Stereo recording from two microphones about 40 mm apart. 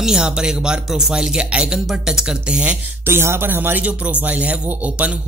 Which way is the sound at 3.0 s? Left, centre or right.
Right.